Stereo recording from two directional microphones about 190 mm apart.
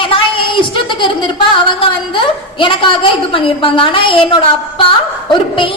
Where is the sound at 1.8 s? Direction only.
25° left (ahead or behind).